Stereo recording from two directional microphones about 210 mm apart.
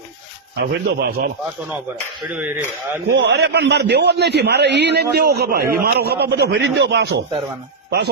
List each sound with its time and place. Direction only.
0.6 s a man's voice: 55° right (ahead or behind)
2.3 s speech: 10° right (ahead or behind)
3.1 s a man's voice: 50° right (ahead or behind)